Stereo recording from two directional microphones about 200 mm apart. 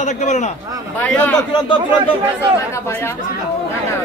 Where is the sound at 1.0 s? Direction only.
5° left (ahead or behind).